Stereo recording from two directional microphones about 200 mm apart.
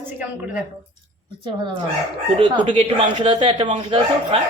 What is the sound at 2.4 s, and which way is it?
Speech, 25° right (ahead or behind).